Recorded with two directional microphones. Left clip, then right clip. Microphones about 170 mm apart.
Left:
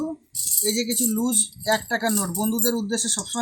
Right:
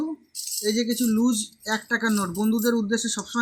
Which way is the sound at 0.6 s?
30° left (ahead or behind).